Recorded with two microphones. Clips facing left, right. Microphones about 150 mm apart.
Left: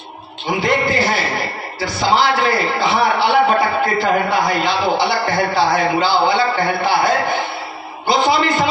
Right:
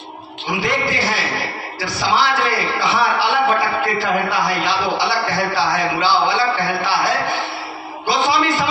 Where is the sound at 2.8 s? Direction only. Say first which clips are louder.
Left 2 dB; 55° left (ahead or behind).